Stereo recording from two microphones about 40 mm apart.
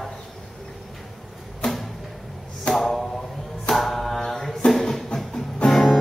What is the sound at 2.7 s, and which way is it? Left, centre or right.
Speech, left.